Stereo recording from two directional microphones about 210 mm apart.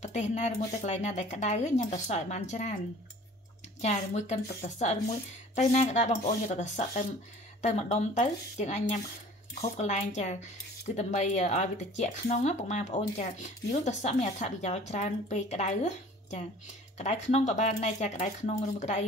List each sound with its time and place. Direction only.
0.0 s speech: 35° left (ahead or behind)
3.8 s speech: 30° left (ahead or behind)